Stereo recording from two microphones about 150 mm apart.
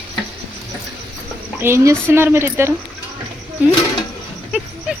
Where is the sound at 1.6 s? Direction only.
20° right (ahead or behind).